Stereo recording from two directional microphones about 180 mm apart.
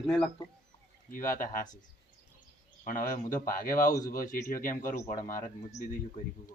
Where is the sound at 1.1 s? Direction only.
50° left (ahead or behind).